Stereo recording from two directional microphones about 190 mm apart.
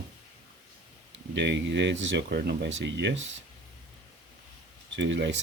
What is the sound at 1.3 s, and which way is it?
Speech, 65° right (ahead or behind).